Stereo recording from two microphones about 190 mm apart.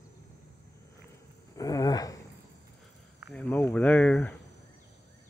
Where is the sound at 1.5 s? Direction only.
20° left (ahead or behind).